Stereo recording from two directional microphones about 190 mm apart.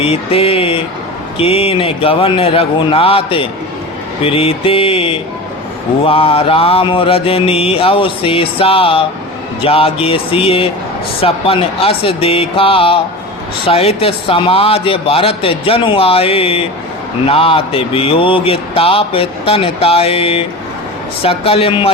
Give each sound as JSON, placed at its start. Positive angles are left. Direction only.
{"t": 0.0, "sound": "a man's voice", "side_deg": 30}